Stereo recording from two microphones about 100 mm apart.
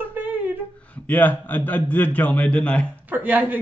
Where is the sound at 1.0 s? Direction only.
15° left (ahead or behind).